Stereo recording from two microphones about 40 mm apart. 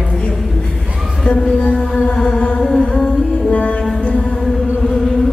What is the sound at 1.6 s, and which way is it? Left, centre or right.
Music, left.